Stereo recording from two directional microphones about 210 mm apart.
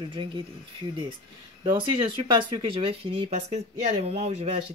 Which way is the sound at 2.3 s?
25° right (ahead or behind).